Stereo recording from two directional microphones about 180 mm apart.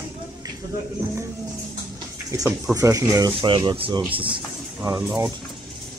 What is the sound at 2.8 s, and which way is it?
Speech, 20° right (ahead or behind).